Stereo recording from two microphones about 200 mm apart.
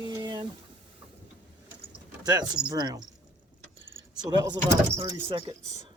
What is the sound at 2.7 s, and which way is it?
Speech, 20° right (ahead or behind).